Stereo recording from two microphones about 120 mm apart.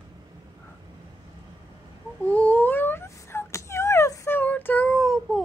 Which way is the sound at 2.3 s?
15° left (ahead or behind).